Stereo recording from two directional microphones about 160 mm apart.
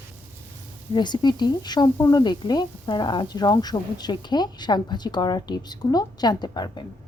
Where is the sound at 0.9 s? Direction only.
25° left (ahead or behind).